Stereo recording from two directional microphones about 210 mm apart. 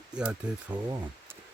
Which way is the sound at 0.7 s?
20° right (ahead or behind).